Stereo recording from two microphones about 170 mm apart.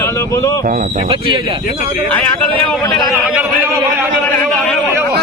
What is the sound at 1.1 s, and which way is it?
Speech, 30° right (ahead or behind).